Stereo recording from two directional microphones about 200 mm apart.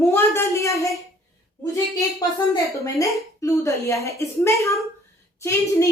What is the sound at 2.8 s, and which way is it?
A woman's voice, 15° left (ahead or behind).